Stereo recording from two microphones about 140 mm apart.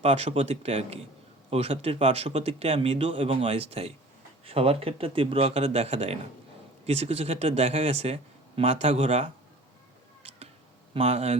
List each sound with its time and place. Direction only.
0.0 s speech: 45° right (ahead or behind)
10.9 s speech: 45° right (ahead or behind)